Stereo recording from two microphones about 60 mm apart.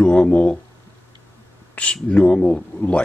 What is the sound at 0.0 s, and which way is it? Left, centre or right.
Speech, centre.